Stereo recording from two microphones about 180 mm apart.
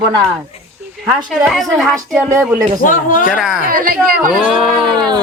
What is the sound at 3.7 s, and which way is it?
Speech, 55° right (ahead or behind).